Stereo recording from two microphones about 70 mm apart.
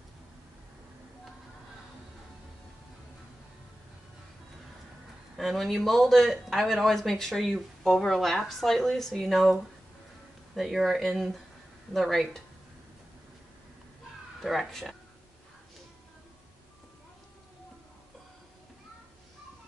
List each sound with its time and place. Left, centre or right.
5.4 s speech: centre
14.4 s speech: centre